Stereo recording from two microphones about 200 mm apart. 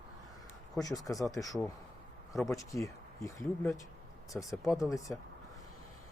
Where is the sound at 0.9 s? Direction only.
20° left (ahead or behind).